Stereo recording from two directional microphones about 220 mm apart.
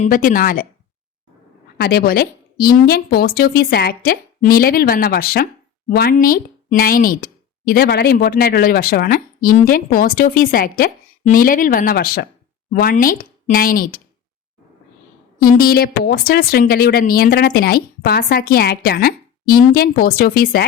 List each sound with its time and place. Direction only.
0.0 s speech: 35° left (ahead or behind)
1.8 s speech: 45° left (ahead or behind)
15.4 s speech: 40° left (ahead or behind)